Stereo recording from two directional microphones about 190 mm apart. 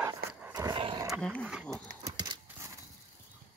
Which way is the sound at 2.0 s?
20° right (ahead or behind).